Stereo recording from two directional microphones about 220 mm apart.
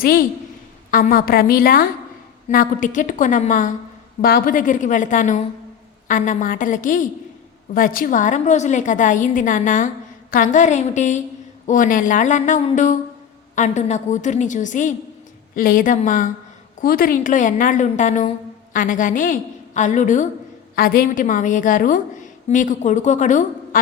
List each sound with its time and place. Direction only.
0.0 s a woman's voice: 40° left (ahead or behind)